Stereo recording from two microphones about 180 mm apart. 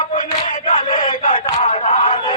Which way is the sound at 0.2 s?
45° left (ahead or behind).